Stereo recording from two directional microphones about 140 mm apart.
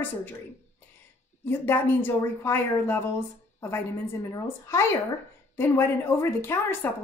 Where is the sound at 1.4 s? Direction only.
15° left (ahead or behind).